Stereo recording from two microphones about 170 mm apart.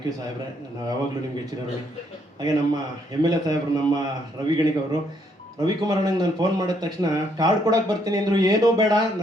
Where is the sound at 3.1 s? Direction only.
25° right (ahead or behind).